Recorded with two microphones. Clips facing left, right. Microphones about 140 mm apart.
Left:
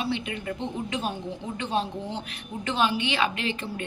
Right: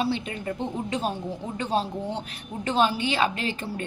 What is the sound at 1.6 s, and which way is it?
A woman's voice, 35° right (ahead or behind).